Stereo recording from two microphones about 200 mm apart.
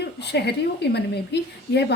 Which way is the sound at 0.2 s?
55° left (ahead or behind).